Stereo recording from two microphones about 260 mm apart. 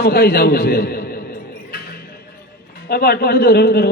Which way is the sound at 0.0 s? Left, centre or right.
Left.